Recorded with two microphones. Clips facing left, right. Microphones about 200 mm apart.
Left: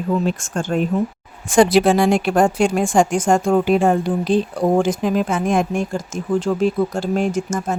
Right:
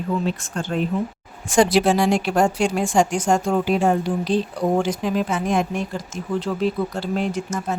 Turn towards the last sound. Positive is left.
turn(degrees=45)  # may be behind; listen again after turning